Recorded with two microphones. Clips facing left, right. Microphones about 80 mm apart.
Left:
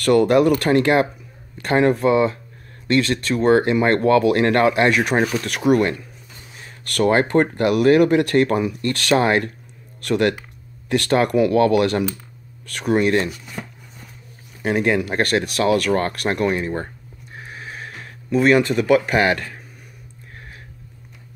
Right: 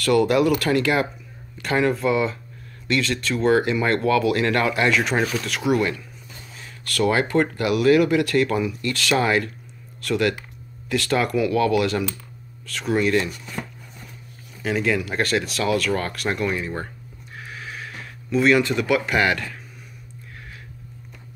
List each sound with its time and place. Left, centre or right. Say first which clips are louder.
0.0 s speech: left 3 dB; left
7.0 s speech: left 3 dB; left
14.6 s speech: left 4 dB; left
16.5 s speech: left 4 dB; left
17.5 s a sound: left 1 dB; left